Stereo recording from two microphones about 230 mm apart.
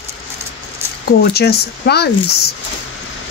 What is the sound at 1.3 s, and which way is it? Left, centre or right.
Speech, left.